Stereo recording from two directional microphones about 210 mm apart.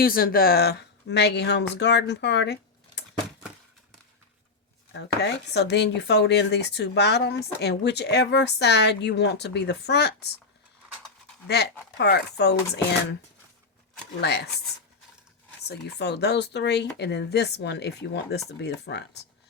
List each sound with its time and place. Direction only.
0.0 s speech: 45° left (ahead or behind)
4.9 s speech: 55° left (ahead or behind)
11.4 s speech: 50° left (ahead or behind)
14.2 s speech: 50° left (ahead or behind)
15.6 s speech: 55° left (ahead or behind)